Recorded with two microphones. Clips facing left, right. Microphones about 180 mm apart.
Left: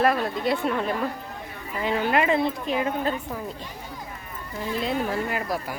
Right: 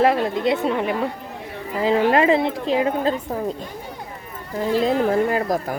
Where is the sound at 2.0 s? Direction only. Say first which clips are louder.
Right 2 dB; 30° right (ahead or behind).